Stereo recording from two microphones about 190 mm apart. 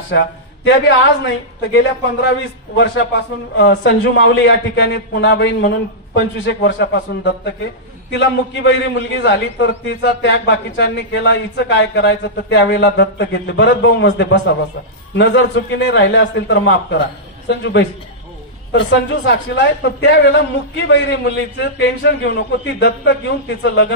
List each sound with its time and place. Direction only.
0.1 s a man's voice: 75° left (ahead or behind)
1.7 s a man's voice: 65° left (ahead or behind)